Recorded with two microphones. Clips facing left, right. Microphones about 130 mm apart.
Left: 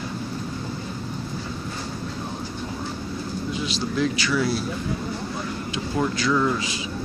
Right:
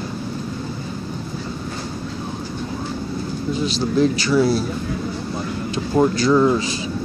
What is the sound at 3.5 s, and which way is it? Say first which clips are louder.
Speech: right 8 dB; 35° right (ahead or behind).